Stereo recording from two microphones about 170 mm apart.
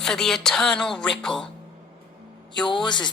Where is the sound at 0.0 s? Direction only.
Centre (ahead or behind).